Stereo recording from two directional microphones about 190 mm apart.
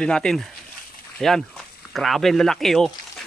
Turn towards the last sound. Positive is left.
turn(degrees=0)  # may be behind; listen again after turning